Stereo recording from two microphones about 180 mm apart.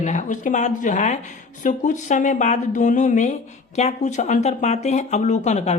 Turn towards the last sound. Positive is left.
turn(degrees=40)  # may be behind; listen again after turning